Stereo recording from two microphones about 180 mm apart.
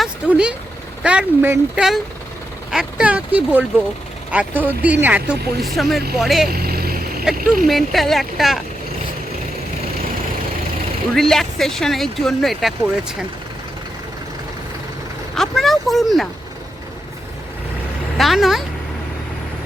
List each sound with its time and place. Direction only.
0.0 s vehicle: 5° right (ahead or behind)
1.0 s speech: 10° right (ahead or behind)
6.5 s vehicle: 55° right (ahead or behind)
7.3 s speech: 5° right (ahead or behind)
11.1 s speech: centre (ahead or behind)
15.4 s speech: centre (ahead or behind)
18.2 s speech: centre (ahead or behind)